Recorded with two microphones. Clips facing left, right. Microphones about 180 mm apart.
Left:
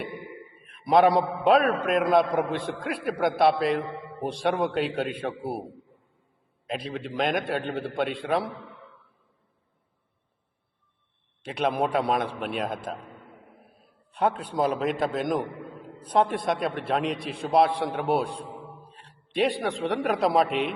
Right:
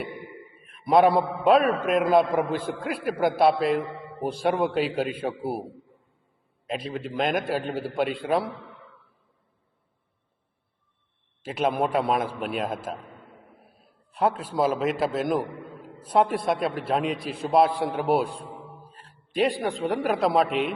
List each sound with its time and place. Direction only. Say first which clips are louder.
0.6 s a man's voice: right 1 dB; centre (ahead or behind)
6.7 s a man's voice: right 1 dB; centre (ahead or behind)
11.4 s a man's voice: right 1 dB; centre (ahead or behind)
14.1 s a man's voice: right 1 dB; 5° right (ahead or behind)